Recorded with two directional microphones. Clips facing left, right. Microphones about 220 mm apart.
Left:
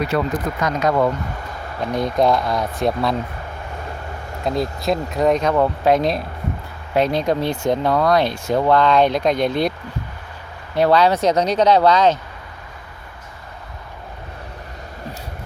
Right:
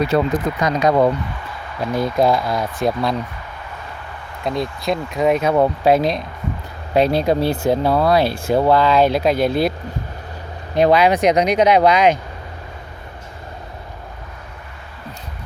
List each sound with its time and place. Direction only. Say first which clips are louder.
0.1 s speech: right 3 dB; 25° right (ahead or behind)
0.6 s speech: right 3 dB; 15° right (ahead or behind)
1.9 s speech: right 1 dB; 5° right (ahead or behind)
4.4 s speech: left 1 dB; centre (ahead or behind)
10.8 s speech: right 1 dB; 15° right (ahead or behind)